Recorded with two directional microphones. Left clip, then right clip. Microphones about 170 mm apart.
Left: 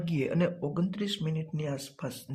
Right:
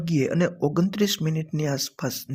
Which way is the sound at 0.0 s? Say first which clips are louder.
Right 6 dB; 30° right (ahead or behind).